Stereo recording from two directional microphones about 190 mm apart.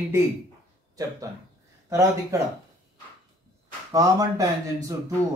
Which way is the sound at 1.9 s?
15° right (ahead or behind).